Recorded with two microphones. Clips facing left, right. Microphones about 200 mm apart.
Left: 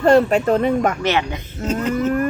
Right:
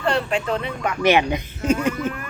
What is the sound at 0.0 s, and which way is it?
Speech, 45° left (ahead or behind).